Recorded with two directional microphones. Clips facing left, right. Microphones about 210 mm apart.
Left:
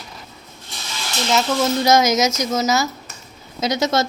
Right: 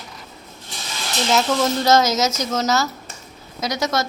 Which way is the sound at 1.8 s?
15° left (ahead or behind).